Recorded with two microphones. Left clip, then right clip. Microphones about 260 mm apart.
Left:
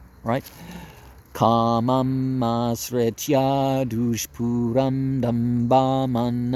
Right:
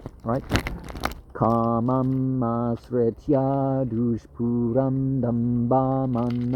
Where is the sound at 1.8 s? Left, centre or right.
Left.